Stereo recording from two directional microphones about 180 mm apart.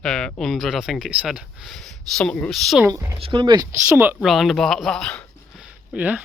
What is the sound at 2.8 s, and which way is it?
Speech, 15° right (ahead or behind).